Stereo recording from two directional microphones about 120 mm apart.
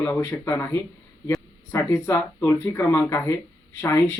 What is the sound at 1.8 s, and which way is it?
Speech, 20° left (ahead or behind).